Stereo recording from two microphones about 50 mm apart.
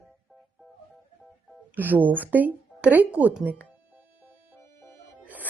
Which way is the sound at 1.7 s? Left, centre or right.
Right.